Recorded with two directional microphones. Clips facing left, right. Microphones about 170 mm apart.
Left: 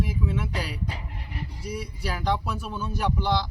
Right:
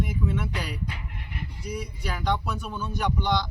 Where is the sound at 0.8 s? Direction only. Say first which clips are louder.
Left 1 dB; 35° left (ahead or behind).